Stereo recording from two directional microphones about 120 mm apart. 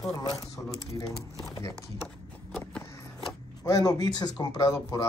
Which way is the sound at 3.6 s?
30° left (ahead or behind).